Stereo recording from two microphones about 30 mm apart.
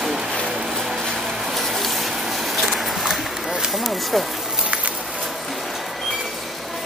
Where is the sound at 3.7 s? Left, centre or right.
Centre.